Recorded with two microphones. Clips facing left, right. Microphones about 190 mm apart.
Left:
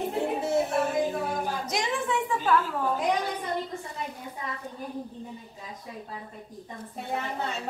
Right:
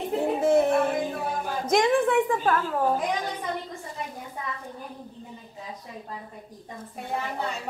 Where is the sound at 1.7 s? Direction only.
55° right (ahead or behind).